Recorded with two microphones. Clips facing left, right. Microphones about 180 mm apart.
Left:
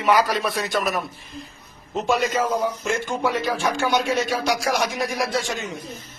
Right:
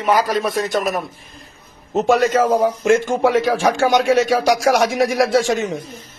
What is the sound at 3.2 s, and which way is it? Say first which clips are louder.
Speech: right 6 dB; 90° right.